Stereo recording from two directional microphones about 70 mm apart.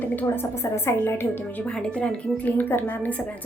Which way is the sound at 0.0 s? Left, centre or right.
Left.